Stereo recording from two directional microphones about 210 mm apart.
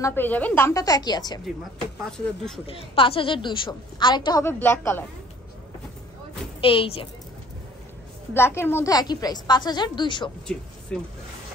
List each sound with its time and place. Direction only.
0.0 s a woman's voice: 10° left (ahead or behind)
2.0 s speech: 5° left (ahead or behind)
2.6 s a woman's voice: 25° left (ahead or behind); by 5.0 s 10° left (ahead or behind)
6.6 s a woman's voice: 25° left (ahead or behind)
8.3 s a woman's voice: 10° left (ahead or behind)
10.4 s speech: 5° left (ahead or behind)